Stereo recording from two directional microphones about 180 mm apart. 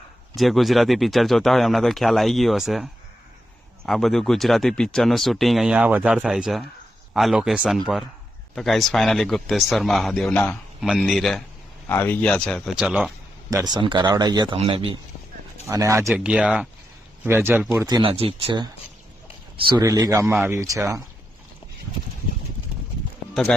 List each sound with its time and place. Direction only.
0.3 s speech: centre (ahead or behind)
13.5 s speech: 20° right (ahead or behind)
15.6 s speech: 15° right (ahead or behind)
16.0 s speech: 5° right (ahead or behind)
17.8 s speech: 25° right (ahead or behind)